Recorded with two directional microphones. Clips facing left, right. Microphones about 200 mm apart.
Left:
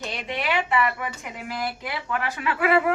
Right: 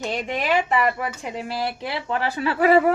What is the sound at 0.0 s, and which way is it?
A woman's voice, 45° right (ahead or behind).